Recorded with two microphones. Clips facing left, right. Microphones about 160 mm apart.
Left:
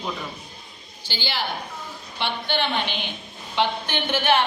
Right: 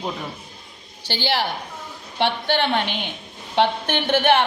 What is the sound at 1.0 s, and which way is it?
A woman's voice, 70° right (ahead or behind).